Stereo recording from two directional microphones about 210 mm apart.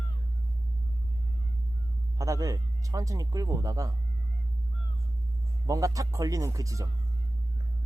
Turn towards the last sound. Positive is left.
turn(degrees=-15)  # may be behind; listen again after turning